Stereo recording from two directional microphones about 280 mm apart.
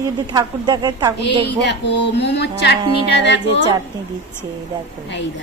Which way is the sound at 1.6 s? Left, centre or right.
Left.